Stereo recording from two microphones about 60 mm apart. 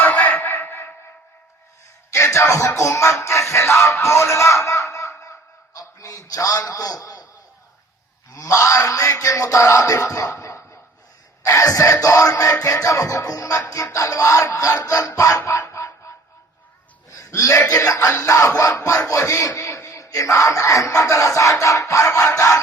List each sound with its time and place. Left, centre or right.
0.0 s a sound: left
2.1 s music: left
5.7 s a man's voice: left
8.3 s music: left
14.8 s music: left
15.4 s music: left
17.2 s a sound: left
17.7 s music: left